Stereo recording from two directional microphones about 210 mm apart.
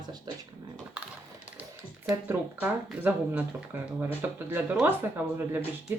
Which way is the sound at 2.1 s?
10° right (ahead or behind).